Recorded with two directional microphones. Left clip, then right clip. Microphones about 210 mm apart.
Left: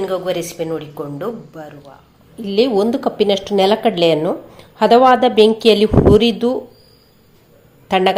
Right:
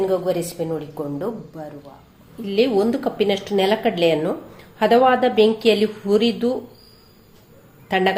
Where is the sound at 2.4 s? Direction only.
25° left (ahead or behind).